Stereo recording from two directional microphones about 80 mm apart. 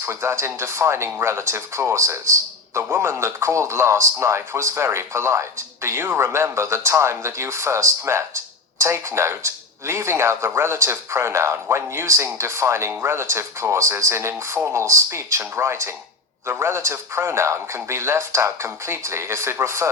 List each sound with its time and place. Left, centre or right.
0.0 s speech: right